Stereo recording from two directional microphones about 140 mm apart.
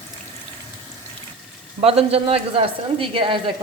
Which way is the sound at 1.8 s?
45° right (ahead or behind).